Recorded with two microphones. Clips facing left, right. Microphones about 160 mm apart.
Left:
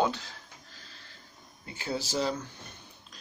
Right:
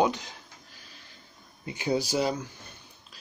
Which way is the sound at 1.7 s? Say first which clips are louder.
Right 6 dB; 15° right (ahead or behind).